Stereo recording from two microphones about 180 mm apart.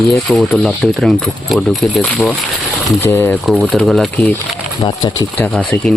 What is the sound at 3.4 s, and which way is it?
Speech, centre (ahead or behind).